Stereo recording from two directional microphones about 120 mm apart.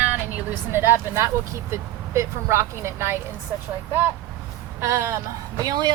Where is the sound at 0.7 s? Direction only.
20° right (ahead or behind).